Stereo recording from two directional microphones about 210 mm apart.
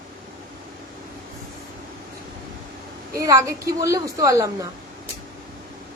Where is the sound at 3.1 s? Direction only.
15° right (ahead or behind).